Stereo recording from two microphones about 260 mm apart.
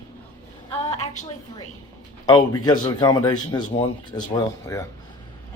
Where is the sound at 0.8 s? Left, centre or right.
Left.